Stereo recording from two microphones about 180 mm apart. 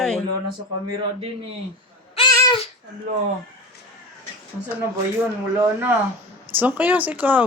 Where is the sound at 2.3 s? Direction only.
20° left (ahead or behind).